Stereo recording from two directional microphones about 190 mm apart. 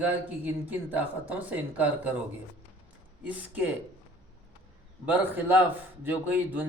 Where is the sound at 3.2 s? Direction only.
10° right (ahead or behind).